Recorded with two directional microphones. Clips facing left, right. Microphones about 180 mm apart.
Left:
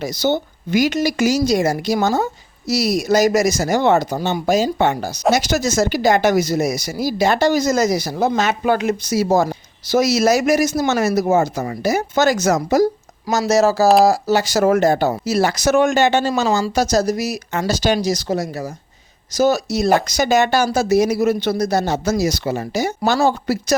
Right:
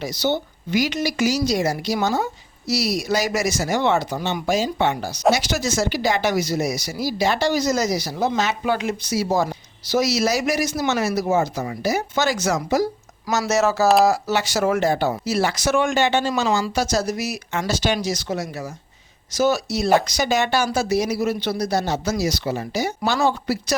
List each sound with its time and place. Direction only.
0.0 s speech: 45° left (ahead or behind)